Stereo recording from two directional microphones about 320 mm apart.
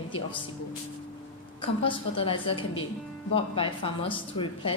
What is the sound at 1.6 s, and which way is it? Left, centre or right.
A woman's voice, centre.